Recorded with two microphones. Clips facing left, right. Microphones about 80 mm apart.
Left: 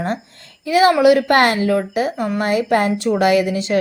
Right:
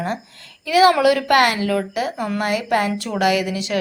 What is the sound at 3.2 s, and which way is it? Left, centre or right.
Speech, left.